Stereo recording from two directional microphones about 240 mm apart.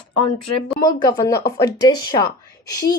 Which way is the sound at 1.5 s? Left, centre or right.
Centre.